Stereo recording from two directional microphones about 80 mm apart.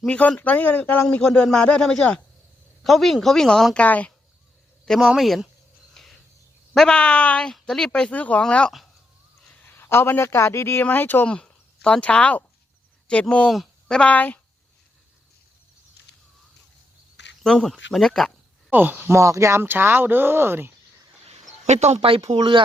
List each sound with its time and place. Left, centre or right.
0.1 s speech: centre
2.8 s speech: centre
3.8 s speech: centre
4.9 s speech: centre
5.9 s cricket: centre
6.7 s speech: centre
9.5 s a man's voice: left
11.3 s speech: centre
13.5 s a woman's voice: centre
17.4 s speech: centre
18.7 s speech: right
19.1 s speech: right